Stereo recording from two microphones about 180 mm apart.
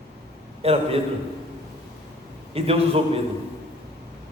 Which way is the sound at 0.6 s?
35° right (ahead or behind).